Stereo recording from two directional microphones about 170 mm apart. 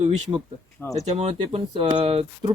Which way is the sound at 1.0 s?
35° right (ahead or behind).